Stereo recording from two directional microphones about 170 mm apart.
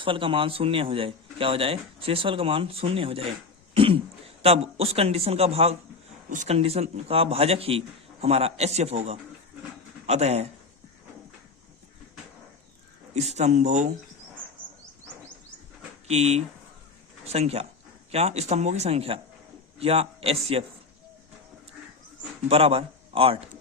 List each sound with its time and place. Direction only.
0.0 s speech: 30° right (ahead or behind)
13.1 s speech: 40° right (ahead or behind)
16.0 s speech: 40° right (ahead or behind)
22.4 s speech: 35° right (ahead or behind)